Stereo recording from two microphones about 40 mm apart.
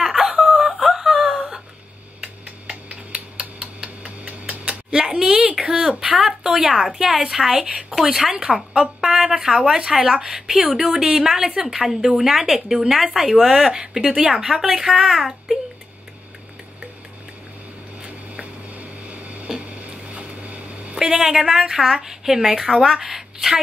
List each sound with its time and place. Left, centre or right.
0.0 s wail: centre
2.4 s tick: right
4.2 s tick-tock: right
4.9 s typing: centre
5.6 s a sound: centre
6.4 s a sound: right
6.7 s speech: centre
15.0 s a child's voice: centre
18.0 s a sound: right
18.7 s a sound: right
20.2 s vehicle: right
21.0 s a woman's voice: centre